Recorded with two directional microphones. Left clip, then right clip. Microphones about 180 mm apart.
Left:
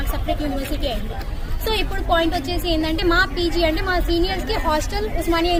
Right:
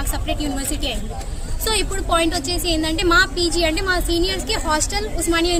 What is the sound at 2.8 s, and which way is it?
A woman's voice, 35° right (ahead or behind).